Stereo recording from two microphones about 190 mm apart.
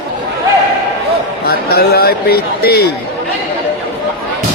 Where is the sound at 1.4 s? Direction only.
55° left (ahead or behind).